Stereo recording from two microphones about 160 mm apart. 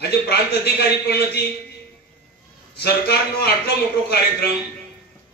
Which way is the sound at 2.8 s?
85° left.